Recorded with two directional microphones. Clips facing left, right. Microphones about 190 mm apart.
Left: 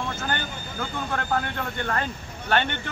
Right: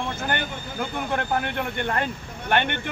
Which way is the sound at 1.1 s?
20° right (ahead or behind).